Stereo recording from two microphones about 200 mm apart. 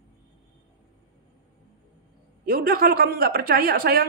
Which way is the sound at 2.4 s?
45° right (ahead or behind).